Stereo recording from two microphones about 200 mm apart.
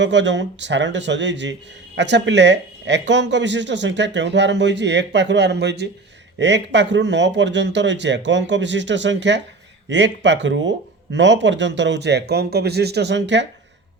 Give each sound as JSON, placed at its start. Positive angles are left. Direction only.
{"t": 0.0, "sound": "speech", "side_deg": -60}